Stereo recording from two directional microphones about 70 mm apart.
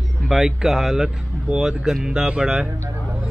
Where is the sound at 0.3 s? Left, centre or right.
Centre.